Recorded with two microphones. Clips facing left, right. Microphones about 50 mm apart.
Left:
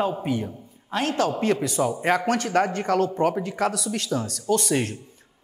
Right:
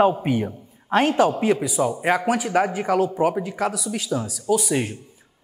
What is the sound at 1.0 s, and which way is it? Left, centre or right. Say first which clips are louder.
A man's voice: right 2 dB; centre.